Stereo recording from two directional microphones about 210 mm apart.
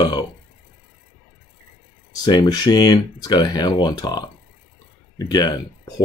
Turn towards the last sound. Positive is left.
turn(degrees=20)  # may be behind; listen again after turning